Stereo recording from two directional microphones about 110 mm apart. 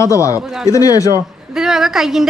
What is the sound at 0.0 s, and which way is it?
Speech, 30° left (ahead or behind).